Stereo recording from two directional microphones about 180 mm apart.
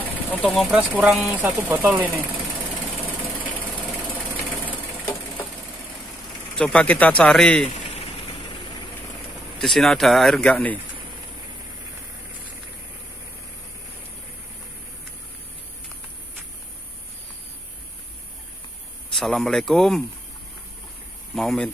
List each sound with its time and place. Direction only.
0.0 s a sound: 10° left (ahead or behind)
0.7 s speech: 10° right (ahead or behind)
1.1 s speech: centre (ahead or behind)
6.6 s speech: 5° left (ahead or behind)
7.7 s a sound: 35° left (ahead or behind)
9.6 s speech: centre (ahead or behind)
19.1 s speech: centre (ahead or behind)
21.4 s speech: 5° left (ahead or behind)